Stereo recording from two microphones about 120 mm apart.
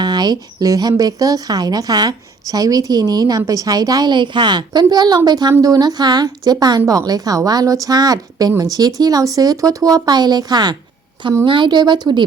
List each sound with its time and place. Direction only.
0.0 s a woman's voice: 35° right (ahead or behind)